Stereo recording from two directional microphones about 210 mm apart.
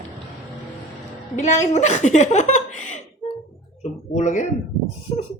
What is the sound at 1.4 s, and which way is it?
Speech, 35° left (ahead or behind).